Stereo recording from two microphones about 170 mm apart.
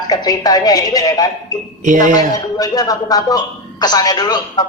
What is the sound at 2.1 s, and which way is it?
A man's voice, 20° left (ahead or behind).